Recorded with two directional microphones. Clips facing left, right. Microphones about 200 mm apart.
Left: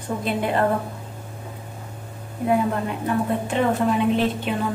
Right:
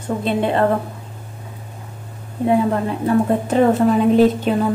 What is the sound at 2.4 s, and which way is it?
Speech, 30° right (ahead or behind).